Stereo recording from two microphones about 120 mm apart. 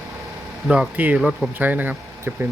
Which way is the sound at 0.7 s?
10° right (ahead or behind).